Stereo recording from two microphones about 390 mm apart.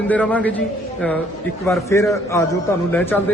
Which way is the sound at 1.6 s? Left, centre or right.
Centre.